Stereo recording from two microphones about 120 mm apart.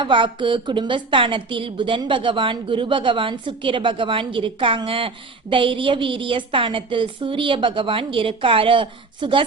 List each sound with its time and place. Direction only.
0.0 s a woman's voice: 45° right (ahead or behind)